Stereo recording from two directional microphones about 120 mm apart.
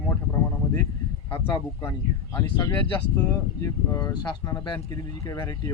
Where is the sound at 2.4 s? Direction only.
30° left (ahead or behind).